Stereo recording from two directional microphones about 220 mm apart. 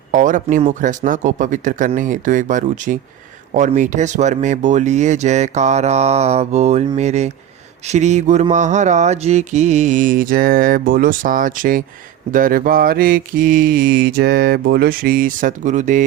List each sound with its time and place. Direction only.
0.1 s mantra: 35° right (ahead or behind)